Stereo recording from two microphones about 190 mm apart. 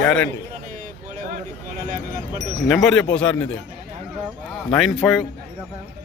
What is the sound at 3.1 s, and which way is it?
Speech, 5° left (ahead or behind).